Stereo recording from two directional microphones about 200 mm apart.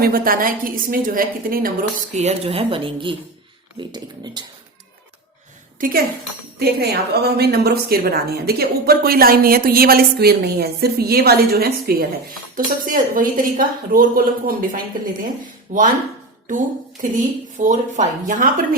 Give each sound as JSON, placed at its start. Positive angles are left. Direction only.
{"t": 0.0, "sound": "a woman's voice", "side_deg": -45}
{"t": 2.1, "sound": "speech", "side_deg": -30}
{"t": 5.8, "sound": "a woman's voice", "side_deg": -45}
{"t": 17.6, "sound": "speech", "side_deg": -40}